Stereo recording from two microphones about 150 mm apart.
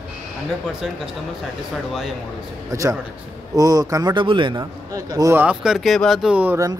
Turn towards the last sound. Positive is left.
turn(degrees=-15)  # may be behind; listen again after turning